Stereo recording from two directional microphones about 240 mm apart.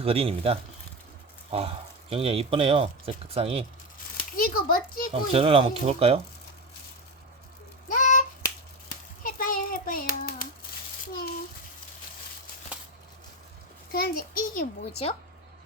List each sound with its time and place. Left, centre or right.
0.0 s speech: right
4.4 s a child's voice: left
5.3 s speech: right
7.9 s finger snapping: left
9.2 s a sound: left
13.9 s a child's voice: left